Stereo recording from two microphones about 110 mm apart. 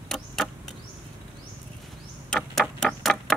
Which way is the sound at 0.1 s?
5° left (ahead or behind).